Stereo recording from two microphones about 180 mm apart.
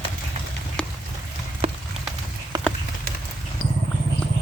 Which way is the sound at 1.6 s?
35° right (ahead or behind).